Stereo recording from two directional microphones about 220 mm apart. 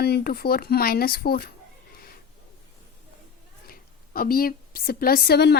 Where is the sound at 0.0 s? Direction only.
45° left (ahead or behind).